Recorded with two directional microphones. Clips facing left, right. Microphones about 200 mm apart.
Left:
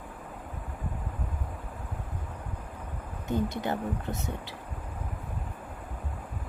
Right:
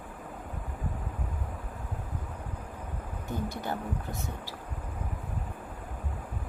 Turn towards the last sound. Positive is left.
turn(degrees=20)  # may be behind; listen again after turning